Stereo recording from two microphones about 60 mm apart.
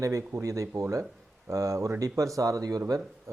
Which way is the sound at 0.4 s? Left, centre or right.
Right.